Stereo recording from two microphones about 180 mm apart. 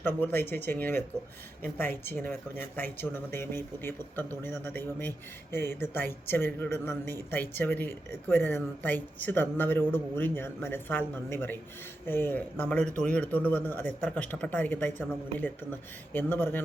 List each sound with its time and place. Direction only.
0.0 s speech: 10° left (ahead or behind)
2.0 s speech: 10° left (ahead or behind)